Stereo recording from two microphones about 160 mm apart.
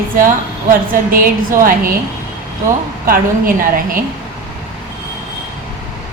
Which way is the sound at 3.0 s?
60° right (ahead or behind).